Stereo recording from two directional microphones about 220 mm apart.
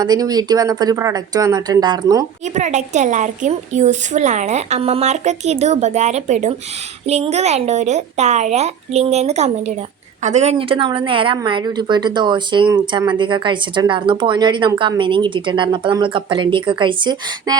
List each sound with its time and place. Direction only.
0.0 s speech: 15° right (ahead or behind)
2.6 s a woman's voice: 35° right (ahead or behind)